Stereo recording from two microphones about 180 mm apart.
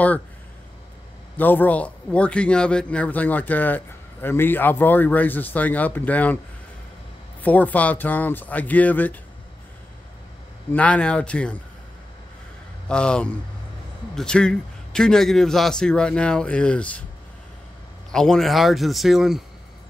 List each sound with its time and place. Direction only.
1.3 s a man's voice: 10° left (ahead or behind)
7.4 s a man's voice: 10° left (ahead or behind)
10.7 s a man's voice: 5° left (ahead or behind)
12.8 s a man's voice: 5° left (ahead or behind)
18.1 s a man's voice: 5° left (ahead or behind)